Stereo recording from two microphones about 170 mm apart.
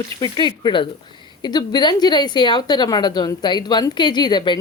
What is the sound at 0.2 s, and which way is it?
A woman's voice, 25° left (ahead or behind).